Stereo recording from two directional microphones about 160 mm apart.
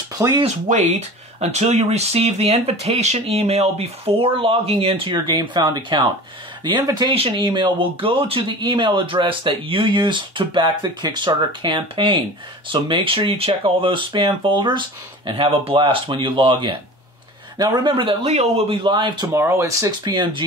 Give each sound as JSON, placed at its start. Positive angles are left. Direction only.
{"t": 0.2, "sound": "speech", "side_deg": -30}
{"t": 0.7, "sound": "speech", "side_deg": -45}
{"t": 18.8, "sound": "speech", "side_deg": -30}
{"t": 19.3, "sound": "speech", "side_deg": -15}